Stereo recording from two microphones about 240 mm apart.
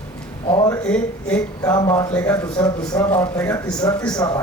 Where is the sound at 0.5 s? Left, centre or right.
Centre.